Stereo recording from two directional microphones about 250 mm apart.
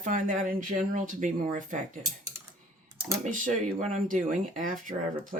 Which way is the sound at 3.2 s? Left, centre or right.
Right.